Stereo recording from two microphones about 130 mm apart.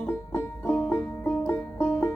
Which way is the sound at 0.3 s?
15° left (ahead or behind).